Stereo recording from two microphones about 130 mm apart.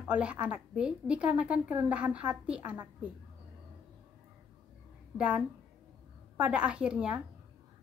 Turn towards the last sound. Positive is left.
turn(degrees=-10)  # may be behind; listen again after turning